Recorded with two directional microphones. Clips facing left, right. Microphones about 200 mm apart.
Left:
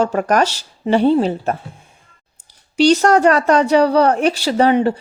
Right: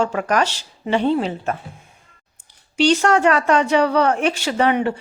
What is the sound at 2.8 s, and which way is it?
Speech, 40° left (ahead or behind).